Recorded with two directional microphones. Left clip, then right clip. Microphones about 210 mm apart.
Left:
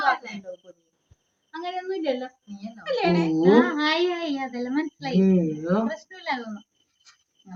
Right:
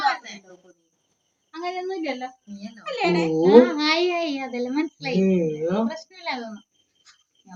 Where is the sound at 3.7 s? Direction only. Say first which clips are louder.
Right 2 dB; 5° left (ahead or behind).